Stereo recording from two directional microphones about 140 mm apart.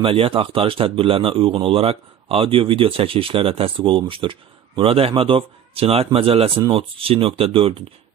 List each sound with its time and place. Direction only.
0.0 s speech: 40° right (ahead or behind)